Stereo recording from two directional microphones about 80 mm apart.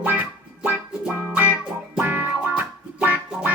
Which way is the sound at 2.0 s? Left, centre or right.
Right.